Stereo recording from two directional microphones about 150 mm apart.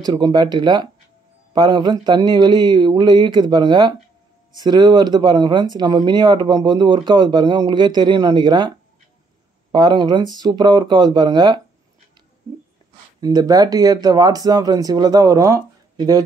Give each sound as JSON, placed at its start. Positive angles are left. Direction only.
{"t": 0.0, "sound": "speech", "side_deg": -25}
{"t": 13.2, "sound": "speech", "side_deg": -25}